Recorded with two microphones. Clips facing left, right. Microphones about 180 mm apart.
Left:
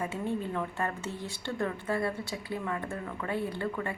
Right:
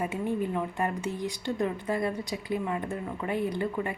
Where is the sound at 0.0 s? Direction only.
15° right (ahead or behind).